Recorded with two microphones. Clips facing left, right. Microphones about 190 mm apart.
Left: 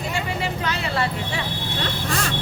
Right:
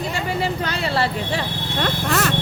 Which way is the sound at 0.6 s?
35° right (ahead or behind).